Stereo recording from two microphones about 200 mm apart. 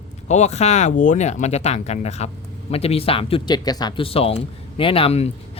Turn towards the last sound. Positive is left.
turn(degrees=30)  # may be behind; listen again after turning